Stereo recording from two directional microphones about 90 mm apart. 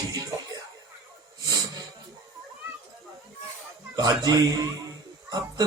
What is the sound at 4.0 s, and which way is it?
Speech, 45° right (ahead or behind).